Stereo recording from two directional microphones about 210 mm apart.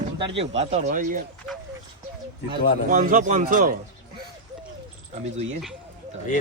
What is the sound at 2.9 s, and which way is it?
Speech, 35° right (ahead or behind).